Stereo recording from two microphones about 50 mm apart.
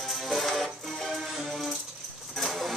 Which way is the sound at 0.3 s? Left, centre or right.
Centre.